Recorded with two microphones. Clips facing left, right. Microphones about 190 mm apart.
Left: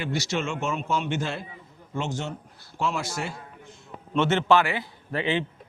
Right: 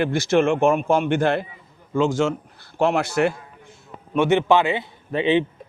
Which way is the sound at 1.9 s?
90° right.